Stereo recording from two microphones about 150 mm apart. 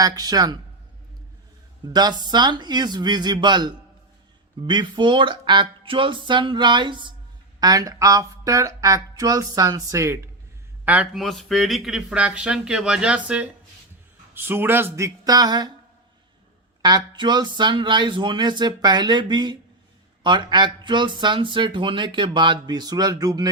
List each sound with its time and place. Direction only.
0.0 s speech: 25° right (ahead or behind)
1.9 s speech: 30° right (ahead or behind)
10.8 s speech: 10° right (ahead or behind); by 15.7 s 25° right (ahead or behind)
16.8 s speech: 30° right (ahead or behind)